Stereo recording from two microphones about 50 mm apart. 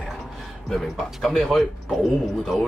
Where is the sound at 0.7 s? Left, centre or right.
Centre.